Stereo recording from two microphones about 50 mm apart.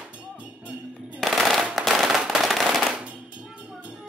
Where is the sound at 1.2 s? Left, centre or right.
Centre.